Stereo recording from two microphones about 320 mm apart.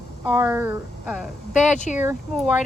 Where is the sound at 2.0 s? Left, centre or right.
Centre.